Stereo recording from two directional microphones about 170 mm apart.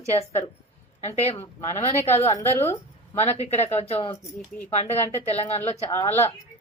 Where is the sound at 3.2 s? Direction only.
35° left (ahead or behind).